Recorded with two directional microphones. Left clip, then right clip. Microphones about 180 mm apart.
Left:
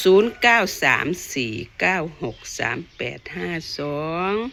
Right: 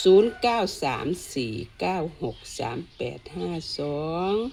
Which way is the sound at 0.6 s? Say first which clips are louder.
Left 5 dB; 5° right (ahead or behind).